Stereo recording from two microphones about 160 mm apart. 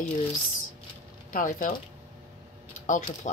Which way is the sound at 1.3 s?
55° left (ahead or behind).